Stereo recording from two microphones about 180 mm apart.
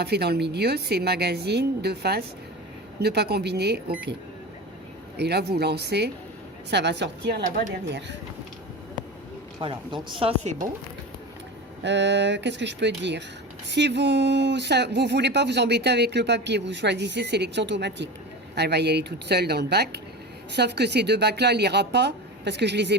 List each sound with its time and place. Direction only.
0.0 s a woman's voice: 65° right (ahead or behind)
5.1 s a woman's voice: 65° right (ahead or behind)
7.4 s speech: 45° right (ahead or behind)
9.6 s speech: 25° right (ahead or behind)
11.8 s a woman's voice: 80° right